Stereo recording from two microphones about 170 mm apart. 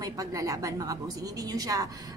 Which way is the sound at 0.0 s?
20° right (ahead or behind).